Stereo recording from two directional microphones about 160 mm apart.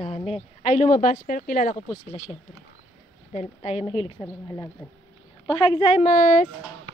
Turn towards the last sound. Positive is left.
turn(degrees=55)  # may be behind; listen again after turning